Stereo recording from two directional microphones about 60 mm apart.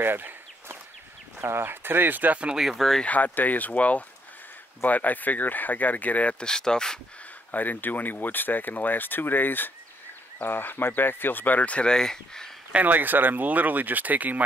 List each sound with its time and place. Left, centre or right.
0.0 s a sound: right
1.4 s speech: right
2.4 s speech: centre
3.0 s speech: left
6.4 s speech: centre
7.5 s speech: left; by 12.4 s centre
12.7 s speech: right